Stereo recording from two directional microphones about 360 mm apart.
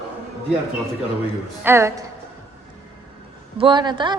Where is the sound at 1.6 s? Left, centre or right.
Centre.